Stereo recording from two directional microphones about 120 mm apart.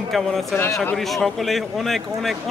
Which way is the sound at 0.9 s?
Centre (ahead or behind).